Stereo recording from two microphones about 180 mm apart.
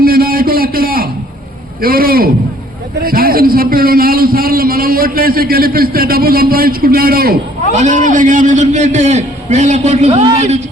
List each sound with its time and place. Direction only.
0.0 s a sound: 55° right (ahead or behind)
1.8 s a man's voice: 55° right (ahead or behind)
7.7 s a man's voice: 40° right (ahead or behind)